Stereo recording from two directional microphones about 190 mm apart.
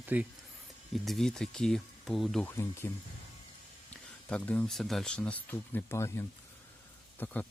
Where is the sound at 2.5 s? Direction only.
15° left (ahead or behind).